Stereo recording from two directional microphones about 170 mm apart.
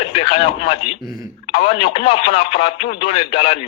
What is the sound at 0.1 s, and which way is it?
Speech, 35° left (ahead or behind).